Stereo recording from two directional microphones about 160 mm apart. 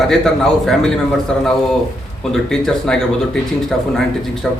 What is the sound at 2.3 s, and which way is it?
Speech, 5° left (ahead or behind).